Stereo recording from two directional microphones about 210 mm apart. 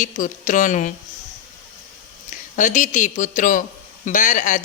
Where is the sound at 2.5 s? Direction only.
35° left (ahead or behind).